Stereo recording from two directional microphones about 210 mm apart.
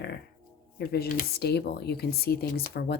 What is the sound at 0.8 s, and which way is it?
Speech, 45° left (ahead or behind).